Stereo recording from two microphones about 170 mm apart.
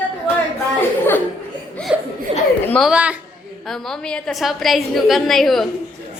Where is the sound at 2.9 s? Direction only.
5° right (ahead or behind).